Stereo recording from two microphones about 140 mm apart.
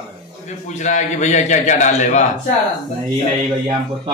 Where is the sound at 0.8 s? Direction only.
60° left (ahead or behind).